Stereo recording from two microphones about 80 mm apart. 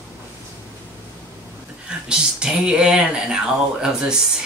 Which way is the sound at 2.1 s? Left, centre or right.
Centre.